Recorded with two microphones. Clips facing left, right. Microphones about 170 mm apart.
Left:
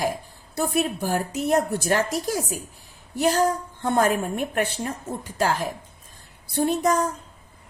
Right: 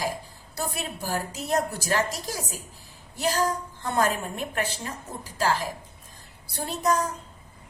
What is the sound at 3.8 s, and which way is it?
A woman's voice, 55° left (ahead or behind).